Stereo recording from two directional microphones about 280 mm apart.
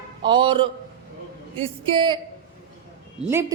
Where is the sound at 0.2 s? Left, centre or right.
Centre.